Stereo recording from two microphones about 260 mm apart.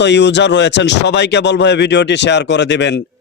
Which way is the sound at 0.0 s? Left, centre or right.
Left.